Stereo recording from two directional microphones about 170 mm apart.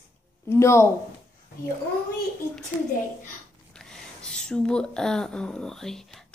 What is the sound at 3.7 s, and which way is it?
Speech, 5° left (ahead or behind).